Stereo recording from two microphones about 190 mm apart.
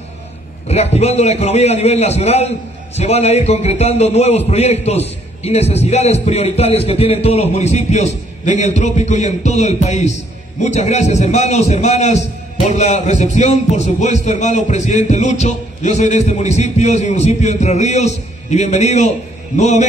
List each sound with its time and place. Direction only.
0.7 s a man's voice: 35° left (ahead or behind)